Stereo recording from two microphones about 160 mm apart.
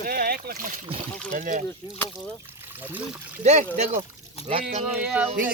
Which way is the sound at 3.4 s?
45° right (ahead or behind).